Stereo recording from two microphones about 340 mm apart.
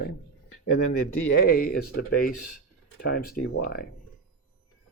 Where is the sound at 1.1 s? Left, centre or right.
Left.